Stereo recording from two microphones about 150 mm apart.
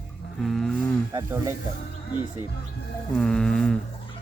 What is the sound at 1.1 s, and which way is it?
Speech, 20° right (ahead or behind).